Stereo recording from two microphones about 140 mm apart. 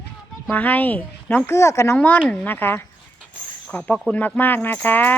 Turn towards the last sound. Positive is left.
turn(degrees=15)  # may be behind; listen again after turning